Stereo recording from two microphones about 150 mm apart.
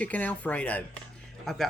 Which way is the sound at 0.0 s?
10° left (ahead or behind).